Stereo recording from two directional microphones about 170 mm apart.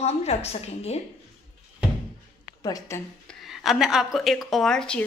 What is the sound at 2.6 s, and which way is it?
Speech, 20° left (ahead or behind).